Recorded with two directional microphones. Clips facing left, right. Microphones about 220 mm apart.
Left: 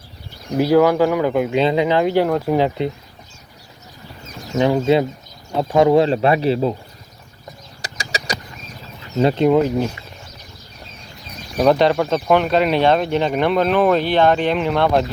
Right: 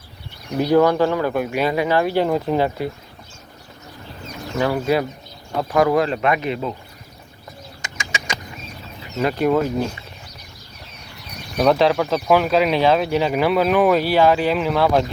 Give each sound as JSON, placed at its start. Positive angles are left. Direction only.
{"t": 0.7, "sound": "speech", "side_deg": 10}
{"t": 4.5, "sound": "speech", "side_deg": 20}
{"t": 7.8, "sound": "bird", "side_deg": 35}
{"t": 9.1, "sound": "speech", "side_deg": 25}
{"t": 11.5, "sound": "speech", "side_deg": 0}